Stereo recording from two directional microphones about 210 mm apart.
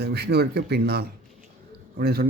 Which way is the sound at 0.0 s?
50° right (ahead or behind).